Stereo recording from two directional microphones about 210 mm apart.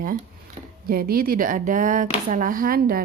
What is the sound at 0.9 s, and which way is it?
A woman's voice, 45° right (ahead or behind).